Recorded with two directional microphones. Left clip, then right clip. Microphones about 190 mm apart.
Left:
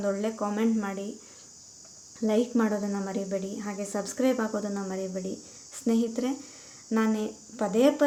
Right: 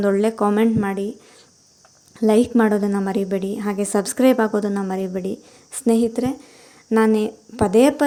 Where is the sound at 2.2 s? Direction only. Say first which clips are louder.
Right 10 dB; 45° right (ahead or behind).